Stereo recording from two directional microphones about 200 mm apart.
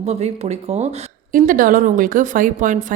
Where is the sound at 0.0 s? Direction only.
35° right (ahead or behind).